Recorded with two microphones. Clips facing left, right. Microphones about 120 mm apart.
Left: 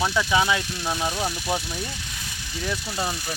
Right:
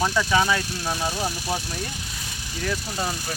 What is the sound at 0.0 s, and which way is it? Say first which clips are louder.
Speech: right 1 dB; 5° left (ahead or behind).